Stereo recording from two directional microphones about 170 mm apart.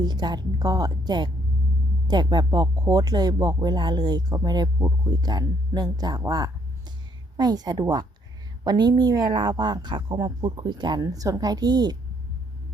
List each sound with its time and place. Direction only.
0.0 s speech: 25° right (ahead or behind)